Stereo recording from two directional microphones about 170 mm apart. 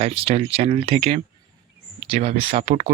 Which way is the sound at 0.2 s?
35° right (ahead or behind).